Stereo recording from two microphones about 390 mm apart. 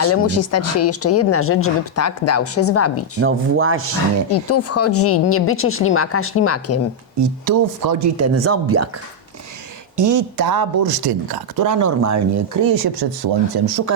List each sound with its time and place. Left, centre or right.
0.0 s speech: left
3.2 s speech: right
4.3 s speech: left
7.2 s speech: right
8.1 s speech: right
10.0 s speech: right
13.7 s speech: right